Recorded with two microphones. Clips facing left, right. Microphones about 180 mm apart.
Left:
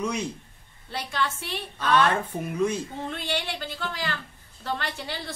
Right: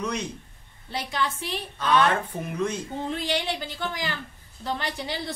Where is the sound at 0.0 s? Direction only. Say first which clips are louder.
Left 1 dB; 10° left (ahead or behind).